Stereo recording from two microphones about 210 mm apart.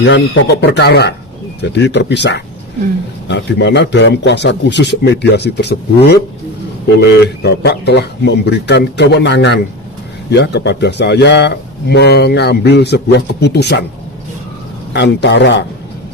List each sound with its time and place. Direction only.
0.0 s a man's voice: 55° left (ahead or behind)
6.8 s speech: 50° left (ahead or behind)
14.9 s a man's voice: 55° left (ahead or behind)